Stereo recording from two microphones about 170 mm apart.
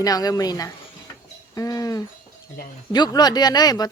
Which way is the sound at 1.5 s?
20° left (ahead or behind).